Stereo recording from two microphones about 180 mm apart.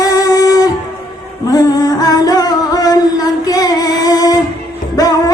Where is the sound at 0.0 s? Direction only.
20° left (ahead or behind).